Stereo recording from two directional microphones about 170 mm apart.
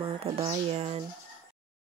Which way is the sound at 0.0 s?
35° right (ahead or behind).